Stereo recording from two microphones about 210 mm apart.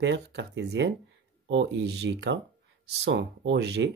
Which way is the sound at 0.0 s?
55° right (ahead or behind).